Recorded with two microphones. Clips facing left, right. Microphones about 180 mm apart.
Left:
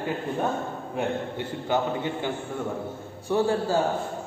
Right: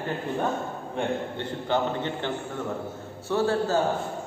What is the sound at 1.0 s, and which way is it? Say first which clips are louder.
A man's voice: even; 10° left (ahead or behind).